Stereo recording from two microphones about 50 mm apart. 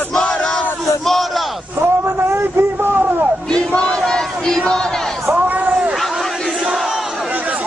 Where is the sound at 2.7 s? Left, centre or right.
Right.